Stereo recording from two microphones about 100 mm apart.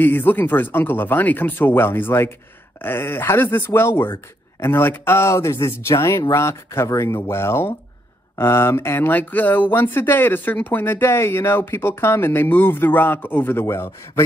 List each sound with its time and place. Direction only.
0.0 s speech: 20° left (ahead or behind)